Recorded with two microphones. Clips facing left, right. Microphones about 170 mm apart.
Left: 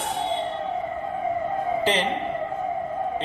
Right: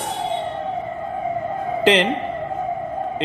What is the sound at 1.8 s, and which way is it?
Speech, 90° right.